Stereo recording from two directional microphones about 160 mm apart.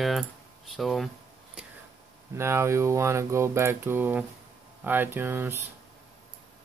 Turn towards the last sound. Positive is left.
turn(degrees=-15)  # may be behind; listen again after turning